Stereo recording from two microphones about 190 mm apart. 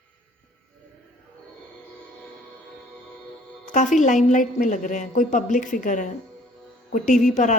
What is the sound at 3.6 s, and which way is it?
Speech, 40° left (ahead or behind).